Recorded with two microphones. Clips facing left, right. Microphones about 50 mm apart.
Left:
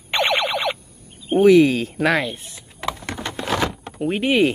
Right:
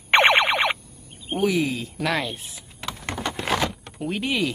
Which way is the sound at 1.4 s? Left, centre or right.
Left.